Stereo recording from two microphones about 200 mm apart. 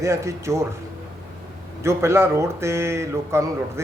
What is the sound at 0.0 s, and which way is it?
Speech, 15° right (ahead or behind).